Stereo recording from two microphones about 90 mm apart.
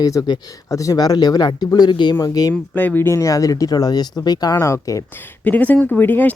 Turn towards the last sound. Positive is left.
turn(degrees=20)  # may be behind; listen again after turning